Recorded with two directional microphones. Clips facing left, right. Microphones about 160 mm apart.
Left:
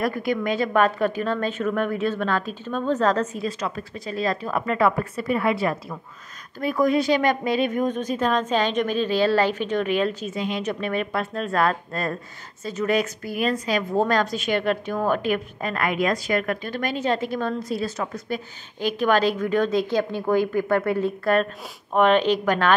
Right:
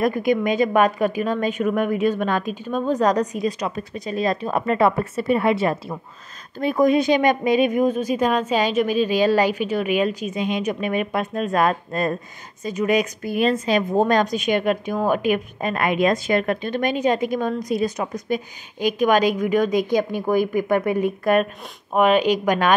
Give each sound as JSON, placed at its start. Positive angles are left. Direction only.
{"t": 0.0, "sound": "a woman's voice", "side_deg": -20}